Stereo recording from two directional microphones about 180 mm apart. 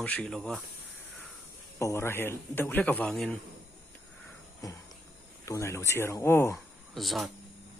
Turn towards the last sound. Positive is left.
turn(degrees=0)  # may be behind; listen again after turning